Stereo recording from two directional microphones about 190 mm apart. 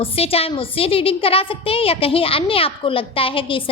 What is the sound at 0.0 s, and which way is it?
A woman's voice, 30° left (ahead or behind).